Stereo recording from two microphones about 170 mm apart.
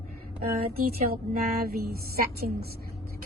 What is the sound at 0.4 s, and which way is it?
Speech, 60° right (ahead or behind).